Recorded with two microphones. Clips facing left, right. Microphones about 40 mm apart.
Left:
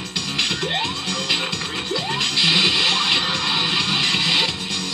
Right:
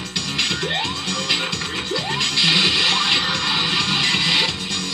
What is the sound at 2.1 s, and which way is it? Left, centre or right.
Music, centre.